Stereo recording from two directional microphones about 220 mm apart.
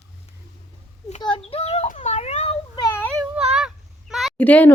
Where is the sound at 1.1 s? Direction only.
25° left (ahead or behind).